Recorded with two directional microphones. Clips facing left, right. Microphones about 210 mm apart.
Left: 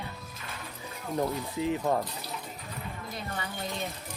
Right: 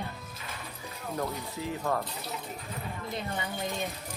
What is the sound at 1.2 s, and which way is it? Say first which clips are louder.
Speech: left 5 dB; 20° left (ahead or behind).